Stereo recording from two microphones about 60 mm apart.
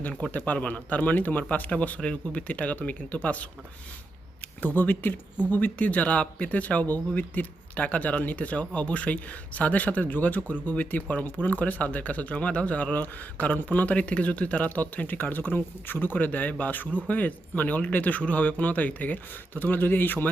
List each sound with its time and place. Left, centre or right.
0.1 s speech: left
4.6 s speech: left